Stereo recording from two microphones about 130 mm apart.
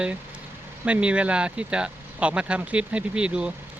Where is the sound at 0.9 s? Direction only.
10° right (ahead or behind).